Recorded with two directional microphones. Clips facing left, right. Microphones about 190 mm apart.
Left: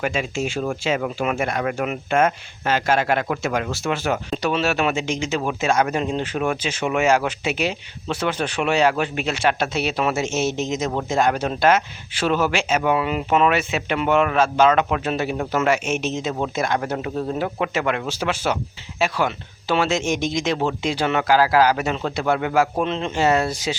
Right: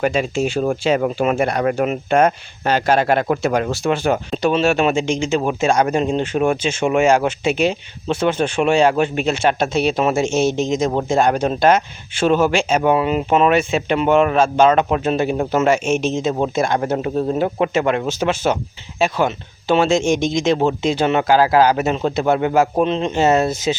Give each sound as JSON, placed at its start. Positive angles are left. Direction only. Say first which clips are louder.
{"t": 0.0, "sound": "speech", "louder": "right 6 dB", "side_deg": -35}
{"t": 10.2, "sound": "speech", "louder": "right 5 dB", "side_deg": 5}
{"t": 10.7, "sound": "speech", "louder": "right 5 dB", "side_deg": -30}